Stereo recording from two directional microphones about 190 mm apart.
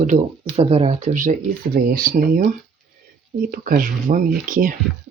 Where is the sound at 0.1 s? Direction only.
30° right (ahead or behind); by 2.5 s 50° right (ahead or behind).